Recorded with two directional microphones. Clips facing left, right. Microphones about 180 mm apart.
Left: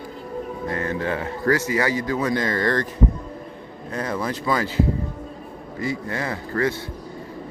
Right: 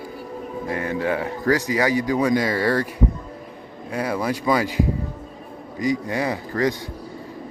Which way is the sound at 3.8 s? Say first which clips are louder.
Right 2 dB; 10° right (ahead or behind).